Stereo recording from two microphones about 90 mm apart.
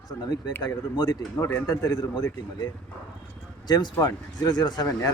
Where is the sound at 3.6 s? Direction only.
50° left (ahead or behind).